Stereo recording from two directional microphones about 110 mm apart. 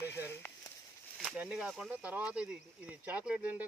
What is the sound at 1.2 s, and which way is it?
Speech, 10° right (ahead or behind).